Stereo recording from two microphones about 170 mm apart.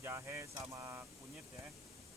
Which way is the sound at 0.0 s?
15° right (ahead or behind).